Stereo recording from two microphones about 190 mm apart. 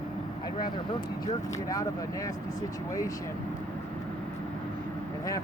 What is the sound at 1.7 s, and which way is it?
Speech, 15° left (ahead or behind).